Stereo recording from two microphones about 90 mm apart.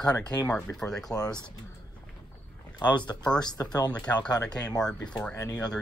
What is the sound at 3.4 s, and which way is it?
Speech, 50° left (ahead or behind).